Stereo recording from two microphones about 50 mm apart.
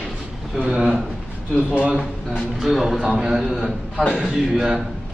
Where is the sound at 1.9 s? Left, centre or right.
Centre.